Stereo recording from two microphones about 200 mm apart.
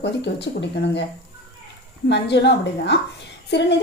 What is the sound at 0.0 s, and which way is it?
A woman's voice, 60° left (ahead or behind).